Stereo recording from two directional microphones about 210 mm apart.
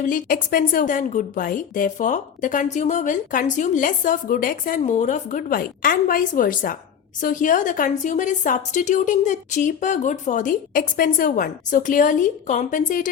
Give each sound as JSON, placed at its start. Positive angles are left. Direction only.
{"t": 0.1, "sound": "a woman's voice", "side_deg": 40}